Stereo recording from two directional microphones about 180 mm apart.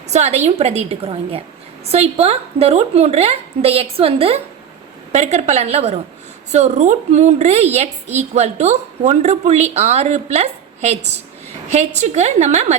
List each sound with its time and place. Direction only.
0.1 s a woman's voice: 40° right (ahead or behind)
11.9 s a woman's voice: 40° right (ahead or behind)